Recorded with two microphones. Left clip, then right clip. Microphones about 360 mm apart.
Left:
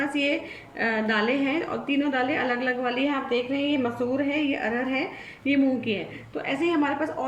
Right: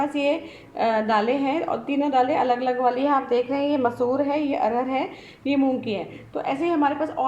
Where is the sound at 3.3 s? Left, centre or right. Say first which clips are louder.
Right 3 dB; right.